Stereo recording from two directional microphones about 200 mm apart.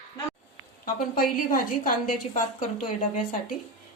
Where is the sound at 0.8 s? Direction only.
45° left (ahead or behind).